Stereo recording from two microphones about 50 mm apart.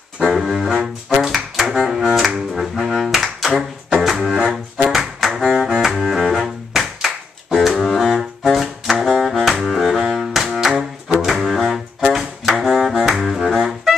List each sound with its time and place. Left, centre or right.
0.2 s music: centre
4.7 s double bass: centre
7.4 s saxophone: centre
9.7 s cello: centre
11.2 s music: centre
12.1 s saxophone: centre
13.2 s music: centre